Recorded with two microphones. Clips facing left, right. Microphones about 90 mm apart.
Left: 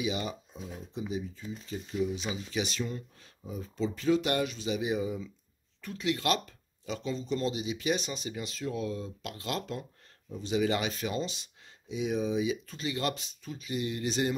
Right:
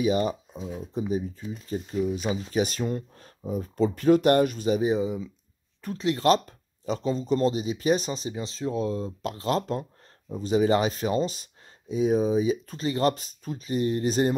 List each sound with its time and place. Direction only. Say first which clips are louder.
0.0 s speech: right 9 dB; 40° right (ahead or behind); by 5.3 s 20° right (ahead or behind)
5.8 s speech: right 5 dB; 35° right (ahead or behind)